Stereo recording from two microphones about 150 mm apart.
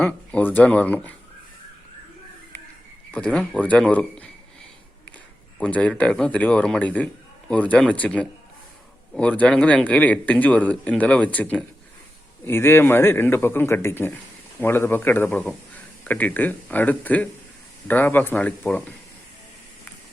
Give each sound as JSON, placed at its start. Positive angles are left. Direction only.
{"t": 0.0, "sound": "speech", "side_deg": 10}
{"t": 3.1, "sound": "speech", "side_deg": 10}
{"t": 5.5, "sound": "speech", "side_deg": 10}